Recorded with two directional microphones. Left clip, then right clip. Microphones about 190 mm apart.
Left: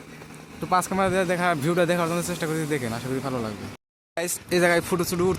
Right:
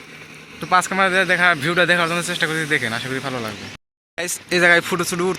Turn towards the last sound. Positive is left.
turn(degrees=5)  # may be behind; listen again after turning